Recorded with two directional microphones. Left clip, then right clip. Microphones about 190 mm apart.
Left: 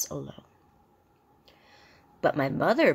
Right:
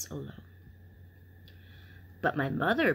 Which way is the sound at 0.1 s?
10° left (ahead or behind).